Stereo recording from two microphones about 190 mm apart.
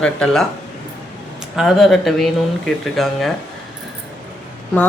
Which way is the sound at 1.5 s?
Centre (ahead or behind).